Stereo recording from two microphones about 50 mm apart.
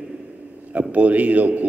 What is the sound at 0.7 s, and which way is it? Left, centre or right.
Speech, right.